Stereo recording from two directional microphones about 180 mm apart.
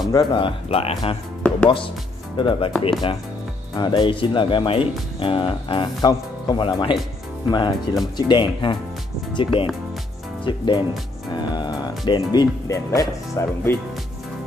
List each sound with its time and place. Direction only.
0.1 s speech: 25° left (ahead or behind)
2.3 s speech: 25° left (ahead or behind)
11.3 s music: 25° left (ahead or behind)
12.0 s speech: 20° left (ahead or behind)